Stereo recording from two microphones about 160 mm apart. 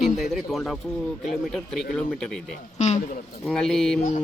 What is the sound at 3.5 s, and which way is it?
Speech, 5° left (ahead or behind).